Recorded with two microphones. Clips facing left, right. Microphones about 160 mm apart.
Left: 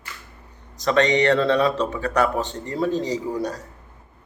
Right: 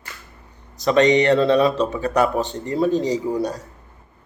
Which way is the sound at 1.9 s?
30° right (ahead or behind).